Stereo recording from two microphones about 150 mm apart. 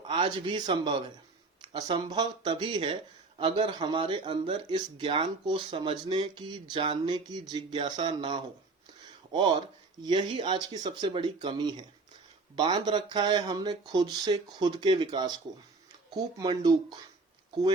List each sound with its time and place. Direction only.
0.0 s speech: 30° right (ahead or behind)
1.6 s a sound: 30° right (ahead or behind)
2.0 s speech: 30° right (ahead or behind)
10.0 s speech: 30° right (ahead or behind)